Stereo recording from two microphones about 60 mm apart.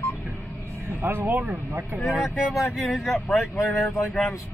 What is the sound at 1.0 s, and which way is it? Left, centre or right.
Speech, right.